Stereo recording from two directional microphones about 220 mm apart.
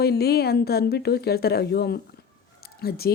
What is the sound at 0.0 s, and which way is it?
A woman's voice, 45° left (ahead or behind).